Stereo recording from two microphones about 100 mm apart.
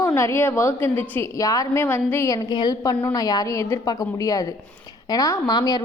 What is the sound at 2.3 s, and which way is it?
Speech, 45° left (ahead or behind).